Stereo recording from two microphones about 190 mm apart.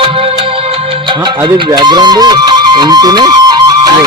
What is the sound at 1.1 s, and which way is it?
Speech, 20° right (ahead or behind).